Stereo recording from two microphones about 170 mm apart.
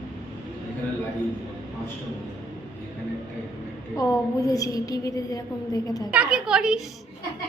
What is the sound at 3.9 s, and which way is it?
A woman's voice, 20° left (ahead or behind).